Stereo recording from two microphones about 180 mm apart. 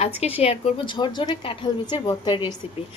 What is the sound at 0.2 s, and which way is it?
A woman's voice, 35° left (ahead or behind).